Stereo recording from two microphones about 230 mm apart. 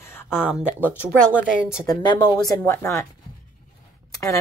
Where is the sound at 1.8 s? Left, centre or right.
Centre.